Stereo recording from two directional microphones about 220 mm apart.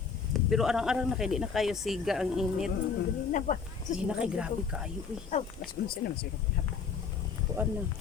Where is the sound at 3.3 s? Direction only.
35° left (ahead or behind).